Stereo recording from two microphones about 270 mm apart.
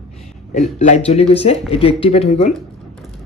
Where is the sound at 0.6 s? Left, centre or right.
Left.